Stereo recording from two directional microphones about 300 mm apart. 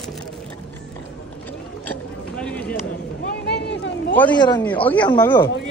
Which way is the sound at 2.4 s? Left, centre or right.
Centre.